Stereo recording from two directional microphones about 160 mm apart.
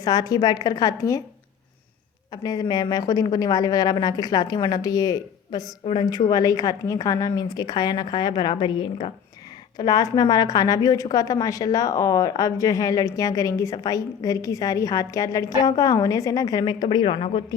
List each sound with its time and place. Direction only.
0.0 s a woman's voice: 25° left (ahead or behind)
2.3 s a woman's voice: 25° left (ahead or behind)